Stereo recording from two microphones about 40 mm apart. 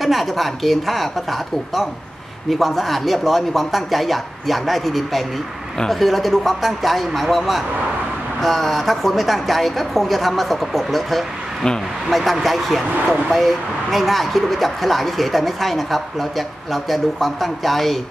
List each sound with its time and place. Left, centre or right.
0.0 s speech: centre